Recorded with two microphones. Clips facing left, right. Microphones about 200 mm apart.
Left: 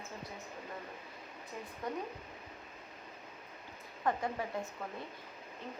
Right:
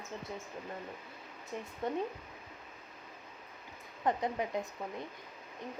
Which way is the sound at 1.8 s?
25° right (ahead or behind).